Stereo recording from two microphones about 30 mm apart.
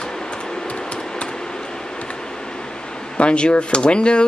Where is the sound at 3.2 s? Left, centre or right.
Left.